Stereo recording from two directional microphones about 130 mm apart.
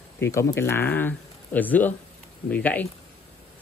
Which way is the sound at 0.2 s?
25° left (ahead or behind).